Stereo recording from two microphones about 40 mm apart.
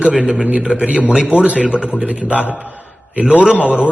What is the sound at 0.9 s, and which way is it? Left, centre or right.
A man's voice, right.